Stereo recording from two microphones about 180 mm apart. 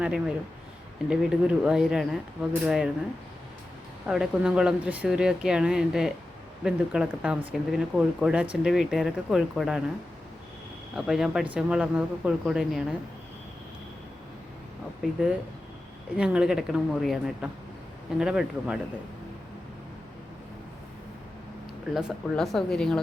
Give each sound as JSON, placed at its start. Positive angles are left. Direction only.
{"t": 0.0, "sound": "speech", "side_deg": -5}
{"t": 4.0, "sound": "speech", "side_deg": -5}
{"t": 10.9, "sound": "speech", "side_deg": 0}
{"t": 15.0, "sound": "speech", "side_deg": -5}
{"t": 21.9, "sound": "speech", "side_deg": 0}